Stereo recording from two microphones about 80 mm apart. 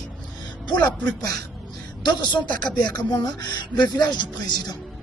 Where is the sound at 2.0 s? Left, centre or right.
Left.